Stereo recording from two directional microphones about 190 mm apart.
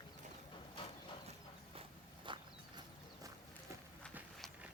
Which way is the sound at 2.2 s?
25° right (ahead or behind).